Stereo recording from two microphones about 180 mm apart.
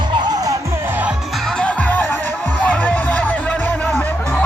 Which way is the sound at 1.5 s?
5° left (ahead or behind).